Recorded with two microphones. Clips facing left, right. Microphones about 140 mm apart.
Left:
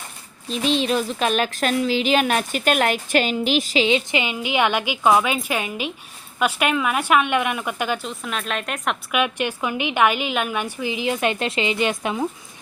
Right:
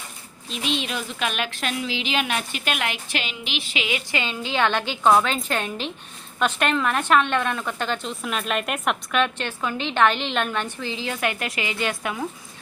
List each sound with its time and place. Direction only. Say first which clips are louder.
0.5 s a woman's voice: left 7 dB; 35° left (ahead or behind)
3.8 s a woman's voice: left 6 dB; 20° left (ahead or behind); by 9.0 s 5° right (ahead or behind)
9.1 s a woman's voice: left 4 dB; 10° left (ahead or behind)